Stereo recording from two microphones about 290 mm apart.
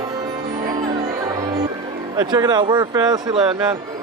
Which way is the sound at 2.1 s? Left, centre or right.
Centre.